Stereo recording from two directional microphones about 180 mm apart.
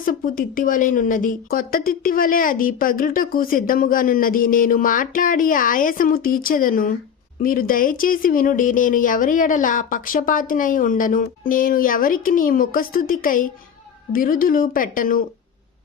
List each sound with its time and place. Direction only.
0.0 s a woman's voice: 50° left (ahead or behind)